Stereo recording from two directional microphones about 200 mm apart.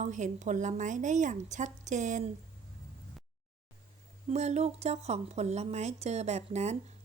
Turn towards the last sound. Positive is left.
turn(degrees=-35)  # may be behind; listen again after turning